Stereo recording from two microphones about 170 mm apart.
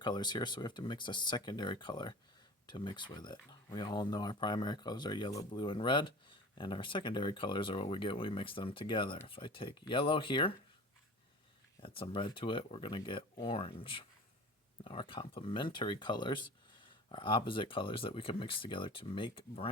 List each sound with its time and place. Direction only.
0.0 s speech: 25° left (ahead or behind)
11.8 s speech: 30° left (ahead or behind)